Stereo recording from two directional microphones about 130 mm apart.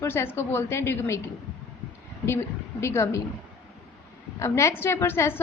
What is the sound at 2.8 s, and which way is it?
Speech, 20° left (ahead or behind).